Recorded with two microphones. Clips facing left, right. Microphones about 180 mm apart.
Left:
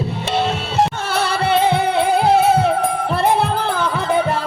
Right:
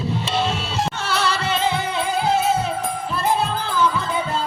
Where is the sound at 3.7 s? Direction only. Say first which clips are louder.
Even; 60° left (ahead or behind).